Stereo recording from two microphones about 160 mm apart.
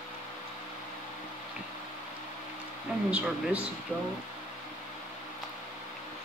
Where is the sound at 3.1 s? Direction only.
5° right (ahead or behind).